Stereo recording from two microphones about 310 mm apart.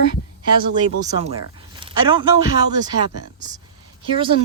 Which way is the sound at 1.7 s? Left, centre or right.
Centre.